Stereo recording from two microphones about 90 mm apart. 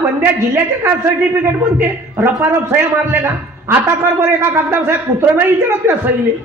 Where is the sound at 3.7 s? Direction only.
25° right (ahead or behind).